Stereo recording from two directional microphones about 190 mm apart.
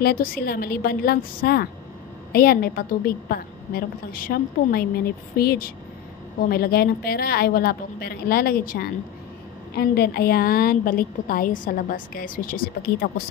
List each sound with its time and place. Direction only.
0.0 s a woman's voice: 50° left (ahead or behind)